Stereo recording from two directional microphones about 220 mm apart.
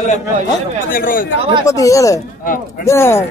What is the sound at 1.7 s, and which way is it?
A man's voice, 15° left (ahead or behind).